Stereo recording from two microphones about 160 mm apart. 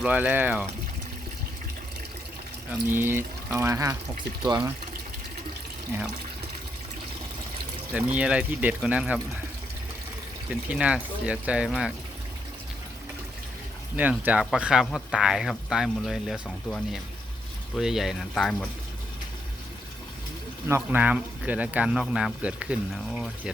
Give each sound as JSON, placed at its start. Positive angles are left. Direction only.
{"t": 0.0, "sound": "speech", "side_deg": -10}
{"t": 2.7, "sound": "speech", "side_deg": -15}
{"t": 7.9, "sound": "speech", "side_deg": -10}
{"t": 10.7, "sound": "speech", "side_deg": -5}
{"t": 13.9, "sound": "speech", "side_deg": -10}
{"t": 20.7, "sound": "speech", "side_deg": -15}